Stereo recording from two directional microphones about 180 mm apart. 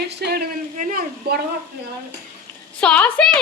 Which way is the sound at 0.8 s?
50° right (ahead or behind).